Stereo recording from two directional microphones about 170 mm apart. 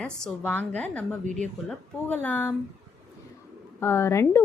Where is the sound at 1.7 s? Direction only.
10° left (ahead or behind).